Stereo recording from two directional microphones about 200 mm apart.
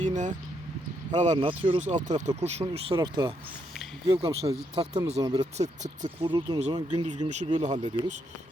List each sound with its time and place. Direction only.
0.0 s speech: 40° right (ahead or behind)
1.8 s speech: 35° right (ahead or behind)
5.2 s speech: 20° right (ahead or behind)
5.5 s speech: 35° right (ahead or behind)
7.7 s speech: 20° right (ahead or behind)